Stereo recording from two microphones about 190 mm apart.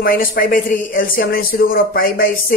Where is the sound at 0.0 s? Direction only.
50° left (ahead or behind).